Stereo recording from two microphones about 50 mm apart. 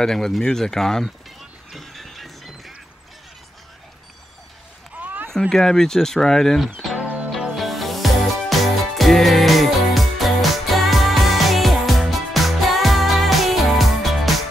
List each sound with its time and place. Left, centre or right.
0.0 s speech: centre
1.4 s music: centre
4.9 s a sound: right
5.5 s speech: centre
7.5 s music: centre